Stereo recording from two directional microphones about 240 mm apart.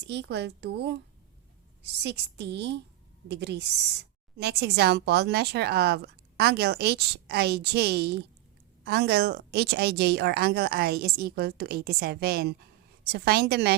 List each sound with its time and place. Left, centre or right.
0.0 s a woman's voice: right